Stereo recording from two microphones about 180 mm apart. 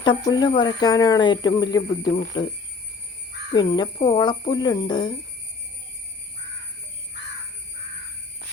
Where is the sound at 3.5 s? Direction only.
30° left (ahead or behind).